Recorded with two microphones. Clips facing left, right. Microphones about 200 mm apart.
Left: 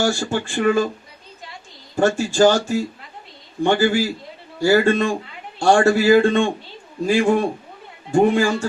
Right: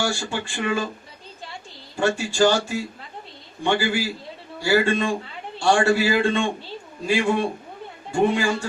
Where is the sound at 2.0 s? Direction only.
45° left (ahead or behind).